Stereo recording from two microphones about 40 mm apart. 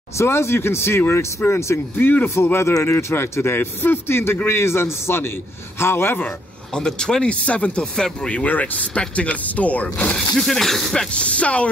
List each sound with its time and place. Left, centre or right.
0.3 s speech: left
2.0 s speech: left
4.5 s a man's voice: left
6.7 s speech: centre
7.4 s speech: left
7.8 s speech: centre
8.3 s speech: left
10.1 s speech: centre
11.1 s speech: left